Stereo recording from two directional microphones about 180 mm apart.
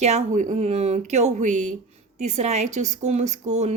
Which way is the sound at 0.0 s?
40° right (ahead or behind).